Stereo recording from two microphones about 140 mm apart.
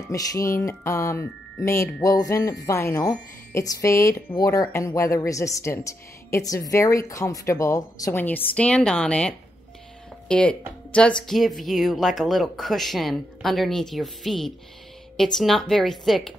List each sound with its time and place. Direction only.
0.0 s speech: 25° left (ahead or behind); by 16.3 s centre (ahead or behind)